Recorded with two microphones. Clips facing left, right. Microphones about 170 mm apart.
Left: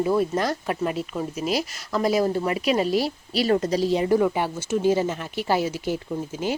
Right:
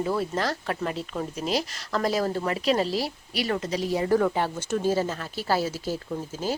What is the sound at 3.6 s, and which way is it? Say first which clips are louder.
Speech: left 6 dB; 40° left (ahead or behind).